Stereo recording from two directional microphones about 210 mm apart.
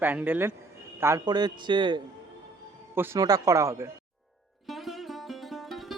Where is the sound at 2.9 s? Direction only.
10° right (ahead or behind).